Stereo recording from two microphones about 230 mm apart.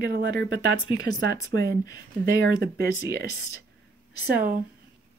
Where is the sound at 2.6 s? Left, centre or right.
Right.